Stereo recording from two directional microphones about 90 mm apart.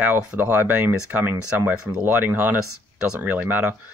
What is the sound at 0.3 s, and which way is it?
Speech, 20° right (ahead or behind).